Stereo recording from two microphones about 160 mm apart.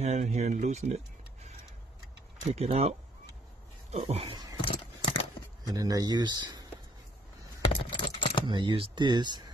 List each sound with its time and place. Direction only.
0.0 s speech: 45° right (ahead or behind)
2.5 s speech: 40° right (ahead or behind)
4.6 s a sound: 35° left (ahead or behind)
5.7 s speech: 20° right (ahead or behind)
7.8 s typing: 30° left (ahead or behind)
8.5 s speech: 30° right (ahead or behind)